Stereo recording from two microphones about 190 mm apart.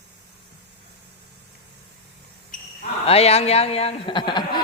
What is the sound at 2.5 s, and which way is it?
Basketball bounce, 45° left (ahead or behind).